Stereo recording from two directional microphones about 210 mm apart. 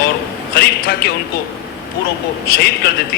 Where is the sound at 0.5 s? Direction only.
50° left (ahead or behind).